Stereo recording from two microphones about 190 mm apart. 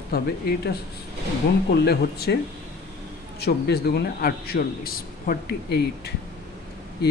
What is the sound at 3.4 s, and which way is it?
Speech, 55° left (ahead or behind).